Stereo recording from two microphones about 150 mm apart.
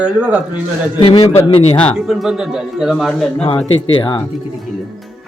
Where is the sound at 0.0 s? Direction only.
10° right (ahead or behind).